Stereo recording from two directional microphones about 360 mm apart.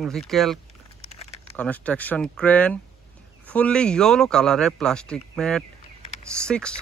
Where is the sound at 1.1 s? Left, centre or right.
Centre.